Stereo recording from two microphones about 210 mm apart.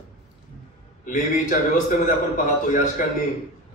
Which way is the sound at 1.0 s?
40° left (ahead or behind).